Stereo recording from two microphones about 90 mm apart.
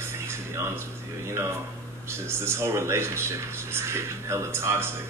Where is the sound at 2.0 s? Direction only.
30° right (ahead or behind).